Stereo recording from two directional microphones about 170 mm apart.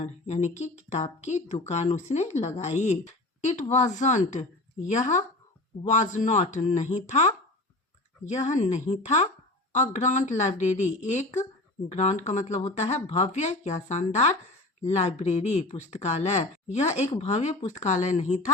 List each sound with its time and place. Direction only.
0.0 s speech: 40° left (ahead or behind)